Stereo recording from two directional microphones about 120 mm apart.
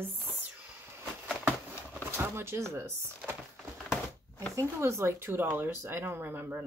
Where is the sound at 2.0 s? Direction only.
20° right (ahead or behind).